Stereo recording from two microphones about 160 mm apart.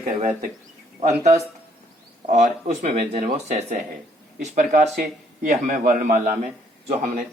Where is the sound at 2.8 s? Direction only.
50° right (ahead or behind).